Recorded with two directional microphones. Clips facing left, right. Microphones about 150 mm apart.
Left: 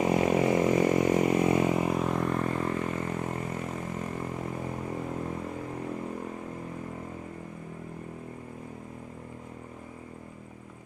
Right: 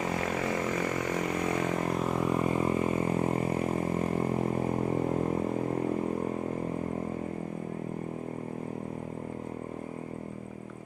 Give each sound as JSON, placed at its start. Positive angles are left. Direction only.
{"t": 0.0, "sound": "vehicle", "side_deg": 20}
{"t": 3.2, "sound": "vehicle", "side_deg": -30}